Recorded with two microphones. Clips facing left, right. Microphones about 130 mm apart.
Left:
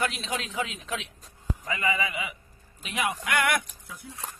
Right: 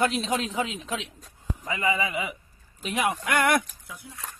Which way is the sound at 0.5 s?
25° right (ahead or behind).